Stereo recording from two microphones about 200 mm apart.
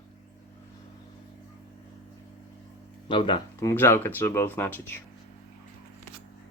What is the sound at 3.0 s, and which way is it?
Speech, 25° left (ahead or behind).